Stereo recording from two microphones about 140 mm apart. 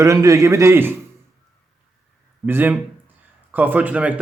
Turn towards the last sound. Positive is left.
turn(degrees=-10)  # may be behind; listen again after turning